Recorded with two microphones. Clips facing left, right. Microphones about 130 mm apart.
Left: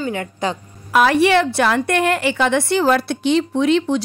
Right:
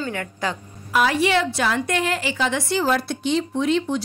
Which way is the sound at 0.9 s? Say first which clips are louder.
Left 5 dB; 60° left (ahead or behind).